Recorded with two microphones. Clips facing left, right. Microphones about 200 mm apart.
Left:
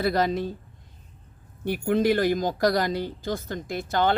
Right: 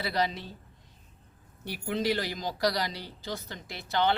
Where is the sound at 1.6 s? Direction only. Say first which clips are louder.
Left 8 dB; 50° left (ahead or behind).